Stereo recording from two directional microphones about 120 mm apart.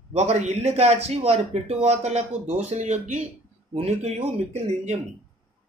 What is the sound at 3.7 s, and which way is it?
A man's voice, 60° right (ahead or behind).